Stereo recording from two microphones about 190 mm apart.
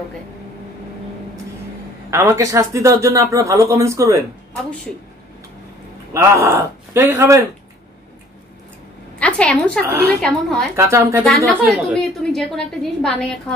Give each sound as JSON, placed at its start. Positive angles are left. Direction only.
{"t": 2.0, "sound": "speech", "side_deg": -15}
{"t": 6.1, "sound": "speech", "side_deg": -15}
{"t": 9.2, "sound": "a woman's voice", "side_deg": 5}
{"t": 10.8, "sound": "speech", "side_deg": -15}
{"t": 11.2, "sound": "a woman's voice", "side_deg": 0}